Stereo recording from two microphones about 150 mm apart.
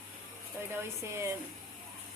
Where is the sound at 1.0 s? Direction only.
20° right (ahead or behind).